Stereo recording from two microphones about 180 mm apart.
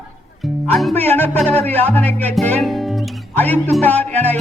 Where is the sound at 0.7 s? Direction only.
Centre (ahead or behind).